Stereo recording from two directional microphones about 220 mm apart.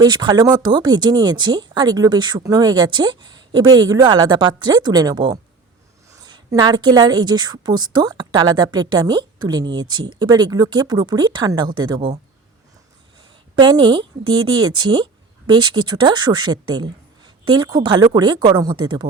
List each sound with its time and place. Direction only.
0.0 s a woman's voice: 20° right (ahead or behind)
13.6 s a woman's voice: 20° right (ahead or behind)